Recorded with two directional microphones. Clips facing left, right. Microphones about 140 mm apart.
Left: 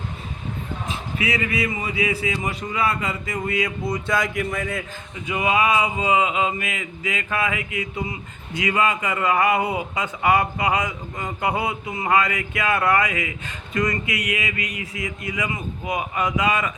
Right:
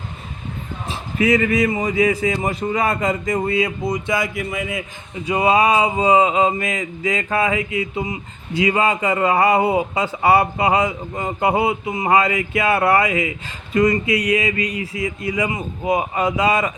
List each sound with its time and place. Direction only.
0.9 s a man's voice: 45° right (ahead or behind); by 4.8 s 10° right (ahead or behind)
5.1 s a man's voice: 35° right (ahead or behind)